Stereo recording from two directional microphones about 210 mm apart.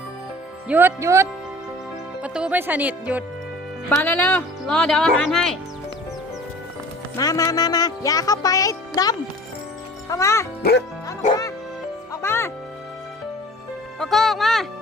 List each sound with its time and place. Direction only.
0.7 s speech: 10° right (ahead or behind)
3.8 s speech: 5° left (ahead or behind)
7.2 s speech: 15° left (ahead or behind)
10.6 s speech: 50° left (ahead or behind)
11.2 s bow-wow: 35° left (ahead or behind)
12.1 s music: 10° left (ahead or behind)
14.0 s speech: centre (ahead or behind)